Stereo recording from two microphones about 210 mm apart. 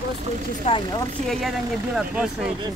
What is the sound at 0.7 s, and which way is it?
Speech, 30° left (ahead or behind).